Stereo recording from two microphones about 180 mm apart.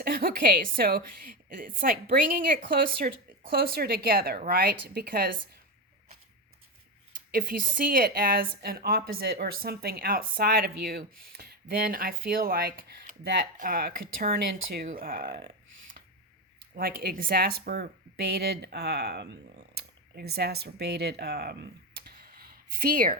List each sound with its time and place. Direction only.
0.0 s a woman's voice: 55° right (ahead or behind)
7.3 s a woman's voice: 55° right (ahead or behind)
16.7 s a woman's voice: 60° right (ahead or behind)